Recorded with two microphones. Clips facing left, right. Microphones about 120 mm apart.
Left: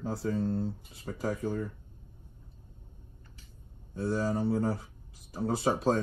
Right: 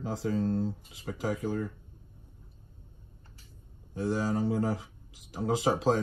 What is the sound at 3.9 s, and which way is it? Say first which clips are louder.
Speech: right 1 dB; 90° right.